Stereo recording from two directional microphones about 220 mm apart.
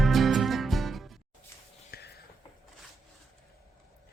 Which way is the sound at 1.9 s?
45° left (ahead or behind).